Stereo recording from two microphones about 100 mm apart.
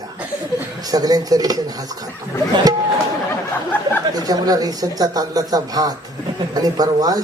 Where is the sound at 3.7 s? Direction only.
20° left (ahead or behind).